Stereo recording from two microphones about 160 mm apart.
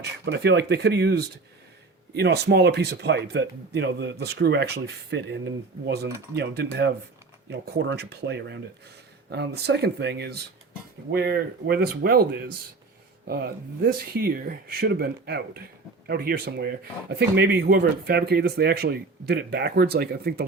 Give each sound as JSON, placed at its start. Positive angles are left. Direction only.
{"t": 0.0, "sound": "speech", "side_deg": -90}
{"t": 11.1, "sound": "speech", "side_deg": -80}
{"t": 13.2, "sound": "speech", "side_deg": -75}